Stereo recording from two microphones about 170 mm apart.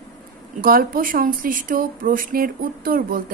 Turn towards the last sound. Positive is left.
turn(degrees=-60)  # may be behind; listen again after turning